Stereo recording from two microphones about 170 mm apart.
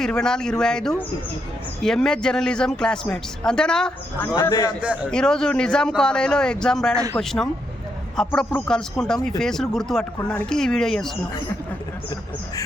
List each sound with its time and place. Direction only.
0.0 s speech: 5° left (ahead or behind)
4.4 s a man's voice: 20° left (ahead or behind)
5.1 s speech: 5° left (ahead or behind)